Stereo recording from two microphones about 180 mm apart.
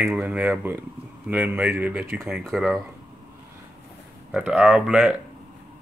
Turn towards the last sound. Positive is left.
turn(degrees=-5)  # may be behind; listen again after turning